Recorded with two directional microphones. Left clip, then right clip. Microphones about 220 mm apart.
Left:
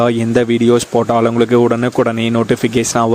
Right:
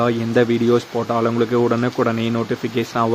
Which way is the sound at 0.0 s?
40° left (ahead or behind).